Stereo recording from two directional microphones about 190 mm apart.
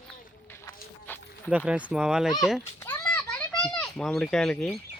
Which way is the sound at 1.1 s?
10° left (ahead or behind).